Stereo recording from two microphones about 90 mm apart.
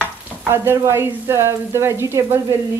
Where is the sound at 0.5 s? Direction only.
30° right (ahead or behind).